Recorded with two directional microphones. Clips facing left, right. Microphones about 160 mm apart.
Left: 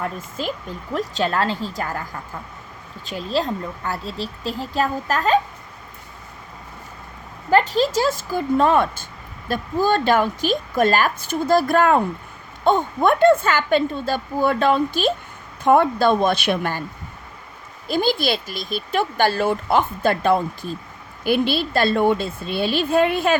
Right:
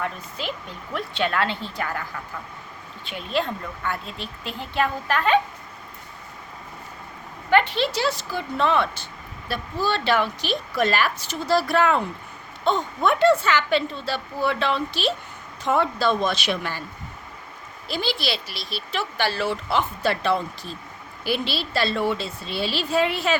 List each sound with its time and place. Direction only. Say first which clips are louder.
0.0 s a woman's voice: left 3 dB; 45° left (ahead or behind)
3.1 s a woman's voice: left 3 dB; 35° left (ahead or behind)
7.5 s speech: left 3 dB; 40° left (ahead or behind)
17.8 s speech: left 7 dB; 50° left (ahead or behind)